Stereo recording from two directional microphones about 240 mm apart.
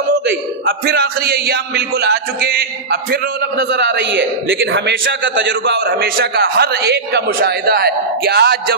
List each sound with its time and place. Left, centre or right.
0.1 s a man's voice: right